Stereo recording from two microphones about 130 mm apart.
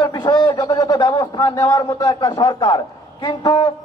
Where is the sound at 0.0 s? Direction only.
30° left (ahead or behind).